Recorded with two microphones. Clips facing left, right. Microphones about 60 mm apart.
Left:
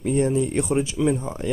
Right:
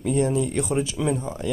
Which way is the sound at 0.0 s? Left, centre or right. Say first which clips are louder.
Left 1 dB; left.